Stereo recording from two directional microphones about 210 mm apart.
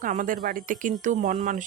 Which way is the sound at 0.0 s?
40° right (ahead or behind).